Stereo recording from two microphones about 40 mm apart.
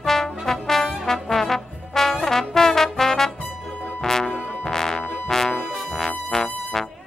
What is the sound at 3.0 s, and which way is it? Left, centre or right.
Music, centre.